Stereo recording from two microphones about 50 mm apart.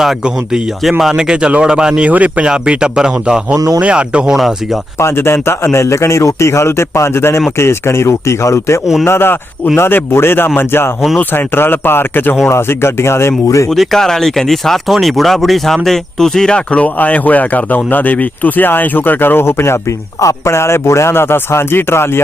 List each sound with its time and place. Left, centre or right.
0.0 s speech: centre
1.1 s speech: centre
2.0 s speech: right
2.5 s speech: centre
4.4 s speech: centre
4.9 s a man's voice: left
9.0 s speech: left
12.5 s speech: left
13.7 s speech: centre
16.8 s speech: left
20.2 s speech: left